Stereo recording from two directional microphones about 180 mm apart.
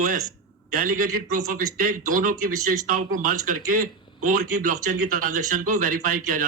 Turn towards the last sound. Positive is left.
turn(degrees=-50)  # may be behind; listen again after turning